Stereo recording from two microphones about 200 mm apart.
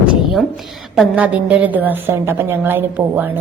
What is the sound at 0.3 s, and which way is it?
A woman's voice, centre (ahead or behind).